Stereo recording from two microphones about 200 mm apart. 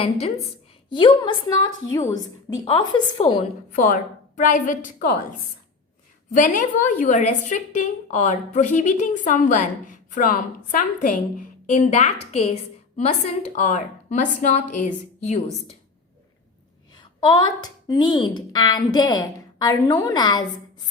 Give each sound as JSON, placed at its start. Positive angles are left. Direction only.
{"t": 0.0, "sound": "a woman's voice", "side_deg": 30}
{"t": 4.4, "sound": "a woman's voice", "side_deg": 40}
{"t": 6.3, "sound": "a woman's voice", "side_deg": 40}
{"t": 17.2, "sound": "a woman's voice", "side_deg": 25}